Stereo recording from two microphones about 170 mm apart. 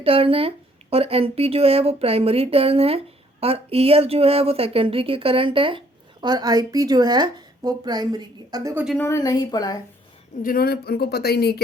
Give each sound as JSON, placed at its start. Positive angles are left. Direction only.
{"t": 0.0, "sound": "a woman's voice", "side_deg": -35}
{"t": 8.7, "sound": "a woman's voice", "side_deg": -5}
{"t": 9.0, "sound": "speech", "side_deg": 15}
{"t": 10.4, "sound": "speech", "side_deg": 60}